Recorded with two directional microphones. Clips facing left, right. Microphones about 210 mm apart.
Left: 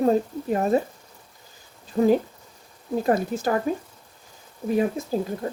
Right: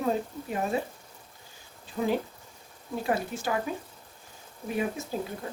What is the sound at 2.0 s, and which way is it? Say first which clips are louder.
A woman's voice: left 9 dB; 40° left (ahead or behind).